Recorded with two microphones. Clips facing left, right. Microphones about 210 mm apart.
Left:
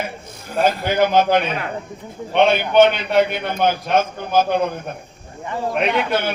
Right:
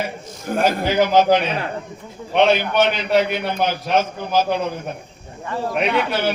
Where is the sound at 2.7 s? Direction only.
55° left (ahead or behind).